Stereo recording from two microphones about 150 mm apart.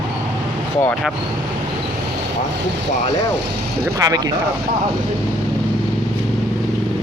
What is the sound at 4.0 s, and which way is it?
Speech, 25° right (ahead or behind).